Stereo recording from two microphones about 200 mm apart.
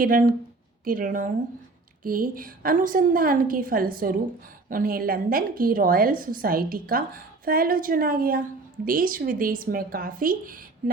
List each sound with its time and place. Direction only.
0.0 s a woman's voice: 45° right (ahead or behind)